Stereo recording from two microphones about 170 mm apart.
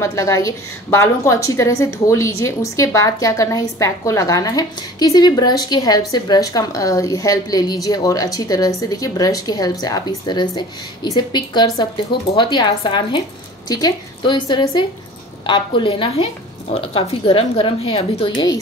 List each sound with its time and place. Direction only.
0.0 s a woman's voice: 20° left (ahead or behind)